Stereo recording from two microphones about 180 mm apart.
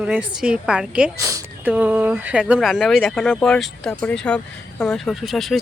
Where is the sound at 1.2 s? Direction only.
20° right (ahead or behind).